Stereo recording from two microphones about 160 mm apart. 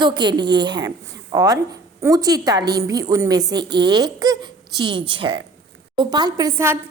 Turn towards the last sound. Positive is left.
turn(degrees=-20)  # may be behind; listen again after turning